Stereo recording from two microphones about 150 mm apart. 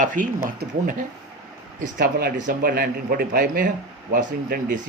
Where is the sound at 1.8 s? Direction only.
80° right.